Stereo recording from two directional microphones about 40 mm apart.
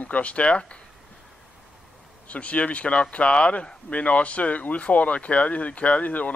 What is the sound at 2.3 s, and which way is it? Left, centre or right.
A man's voice, left.